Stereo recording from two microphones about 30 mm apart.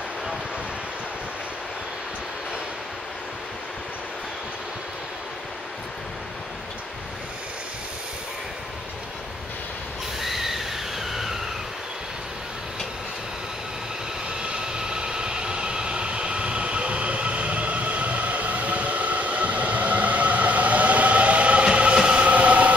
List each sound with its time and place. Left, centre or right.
10.2 s a sound: centre
14.4 s vehicle: right
21.9 s train: right
22.3 s train: right